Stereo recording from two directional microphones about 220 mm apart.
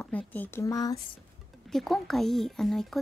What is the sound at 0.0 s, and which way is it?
Speech, 10° left (ahead or behind).